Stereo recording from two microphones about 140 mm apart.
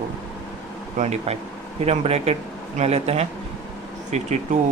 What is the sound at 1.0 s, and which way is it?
Speech, 50° right (ahead or behind).